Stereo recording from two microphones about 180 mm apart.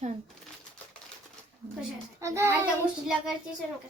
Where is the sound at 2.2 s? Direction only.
15° right (ahead or behind).